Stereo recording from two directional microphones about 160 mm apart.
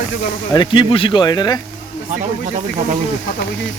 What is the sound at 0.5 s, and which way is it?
Speech, 30° left (ahead or behind).